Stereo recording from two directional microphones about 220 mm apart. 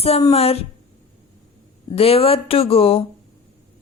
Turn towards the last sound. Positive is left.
turn(degrees=25)  # may be behind; listen again after turning